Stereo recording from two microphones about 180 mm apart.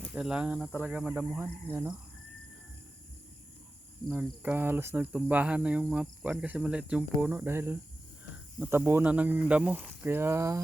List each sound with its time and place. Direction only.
0.1 s speech: 5° right (ahead or behind)
4.1 s speech: 10° right (ahead or behind)